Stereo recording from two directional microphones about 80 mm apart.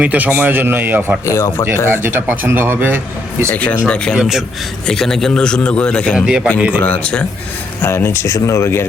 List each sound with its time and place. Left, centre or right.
0.0 s a man's voice: centre
1.2 s speech: left
1.7 s speech: right
3.5 s a man's voice: centre
4.2 s a man's voice: centre
4.9 s a man's voice: centre
6.1 s a man's voice: centre
6.8 s a man's voice: centre
7.8 s speech: left